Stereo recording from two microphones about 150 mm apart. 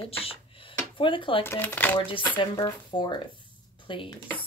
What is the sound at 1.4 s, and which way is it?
Speech, 15° left (ahead or behind).